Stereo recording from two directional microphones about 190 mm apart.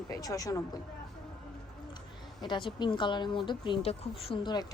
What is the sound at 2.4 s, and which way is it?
A woman's voice, 25° left (ahead or behind).